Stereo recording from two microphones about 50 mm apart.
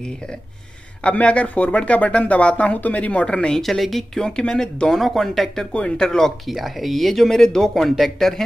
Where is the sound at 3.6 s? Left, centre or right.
Centre.